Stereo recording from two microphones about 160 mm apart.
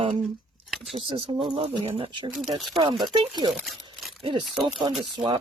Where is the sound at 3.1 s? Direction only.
25° right (ahead or behind).